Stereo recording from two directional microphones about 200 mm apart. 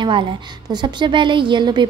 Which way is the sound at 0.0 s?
25° right (ahead or behind).